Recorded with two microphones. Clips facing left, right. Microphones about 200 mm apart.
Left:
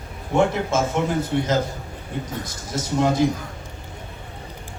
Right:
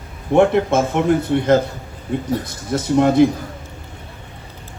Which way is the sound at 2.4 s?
60° right (ahead or behind).